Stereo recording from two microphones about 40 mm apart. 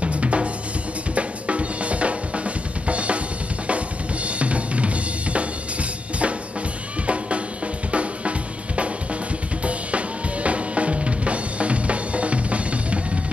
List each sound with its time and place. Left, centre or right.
0.0 s drum: right
3.6 s drum kit: right
7.1 s drum: right